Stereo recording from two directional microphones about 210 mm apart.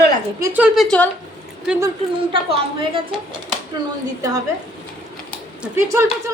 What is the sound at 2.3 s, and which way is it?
Speech, 25° right (ahead or behind).